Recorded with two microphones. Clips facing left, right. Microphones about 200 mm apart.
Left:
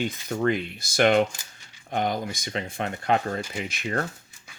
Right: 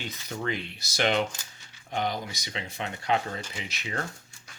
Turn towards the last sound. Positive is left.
turn(degrees=50)  # may be behind; listen again after turning